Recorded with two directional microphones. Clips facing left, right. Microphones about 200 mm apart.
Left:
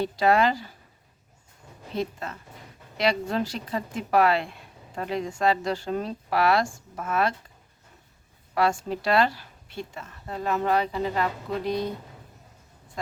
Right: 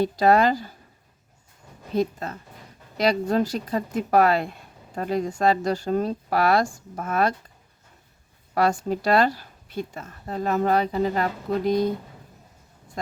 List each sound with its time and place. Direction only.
0.0 s speech: 40° right (ahead or behind)
2.0 s speech: 40° right (ahead or behind)
8.5 s speech: 40° right (ahead or behind)